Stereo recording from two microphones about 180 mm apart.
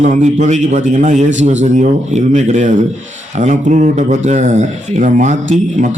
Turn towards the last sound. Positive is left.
turn(degrees=-40)  # may be behind; listen again after turning